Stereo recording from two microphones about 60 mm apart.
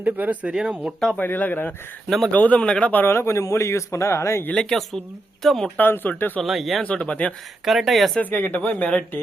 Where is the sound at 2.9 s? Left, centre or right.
Left.